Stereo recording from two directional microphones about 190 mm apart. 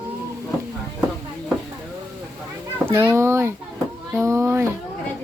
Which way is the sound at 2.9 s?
15° right (ahead or behind).